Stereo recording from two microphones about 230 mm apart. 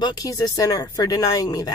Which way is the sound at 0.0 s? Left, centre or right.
Centre.